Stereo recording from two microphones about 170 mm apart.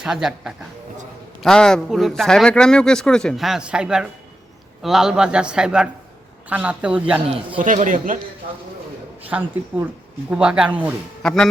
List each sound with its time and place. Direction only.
0.0 s a man's voice: 5° right (ahead or behind)
7.6 s speech: 50° right (ahead or behind)
9.3 s speech: 10° right (ahead or behind)
11.2 s speech: 5° left (ahead or behind)